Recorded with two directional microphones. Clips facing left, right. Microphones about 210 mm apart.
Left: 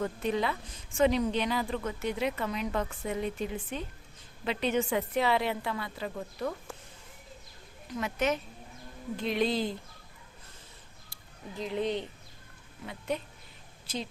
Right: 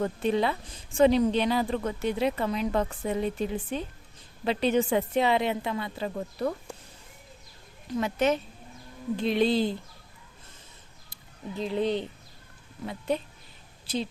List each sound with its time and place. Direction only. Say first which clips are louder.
0.0 s a woman's voice: right 4 dB; 30° right (ahead or behind)
7.9 s a woman's voice: right 5 dB; 30° right (ahead or behind)
11.1 s a woman's voice: right 6 dB; 30° right (ahead or behind)